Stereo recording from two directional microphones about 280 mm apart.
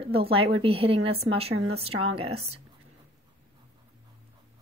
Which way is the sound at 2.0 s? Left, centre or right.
Centre.